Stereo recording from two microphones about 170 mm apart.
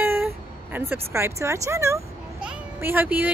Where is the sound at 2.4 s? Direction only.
10° right (ahead or behind).